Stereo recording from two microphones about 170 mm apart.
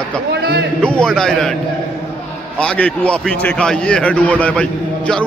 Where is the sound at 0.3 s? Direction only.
70° right (ahead or behind).